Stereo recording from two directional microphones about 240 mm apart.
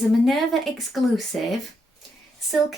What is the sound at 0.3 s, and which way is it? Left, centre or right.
Speech, centre.